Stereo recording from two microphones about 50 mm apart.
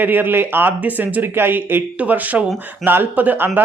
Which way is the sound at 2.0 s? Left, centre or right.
Right.